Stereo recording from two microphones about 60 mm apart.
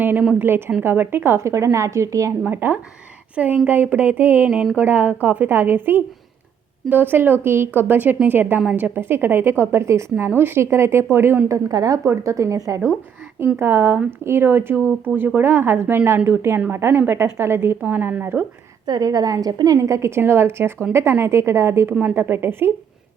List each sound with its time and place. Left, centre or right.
0.0 s a woman's voice: right
1.5 s a woman's voice: right
2.5 s a woman's voice: right
7.8 s a woman's voice: right
11.4 s a woman's voice: right
13.6 s a woman's voice: right
17.9 s a woman's voice: right
18.9 s a woman's voice: right